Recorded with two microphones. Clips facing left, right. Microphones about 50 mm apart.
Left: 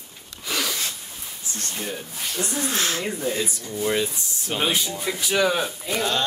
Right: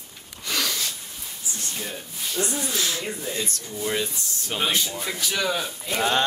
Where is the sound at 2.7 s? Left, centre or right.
Left.